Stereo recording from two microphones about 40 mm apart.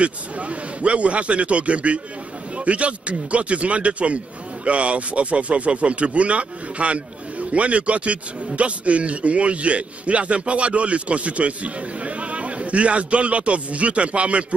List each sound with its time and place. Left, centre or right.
0.0 s a man's voice: right